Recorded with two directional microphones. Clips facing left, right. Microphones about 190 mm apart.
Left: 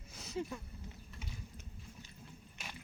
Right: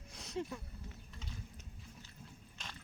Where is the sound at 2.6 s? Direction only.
10° left (ahead or behind).